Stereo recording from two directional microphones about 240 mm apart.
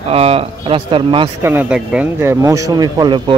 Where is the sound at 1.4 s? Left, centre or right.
Centre.